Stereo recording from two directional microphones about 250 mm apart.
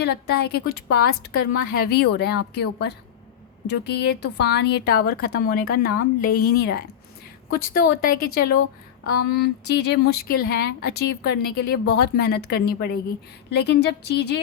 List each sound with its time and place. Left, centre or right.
0.0 s speech: left
3.7 s a woman's voice: left